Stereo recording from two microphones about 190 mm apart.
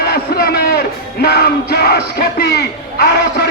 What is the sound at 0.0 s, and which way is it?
Music, 55° left (ahead or behind).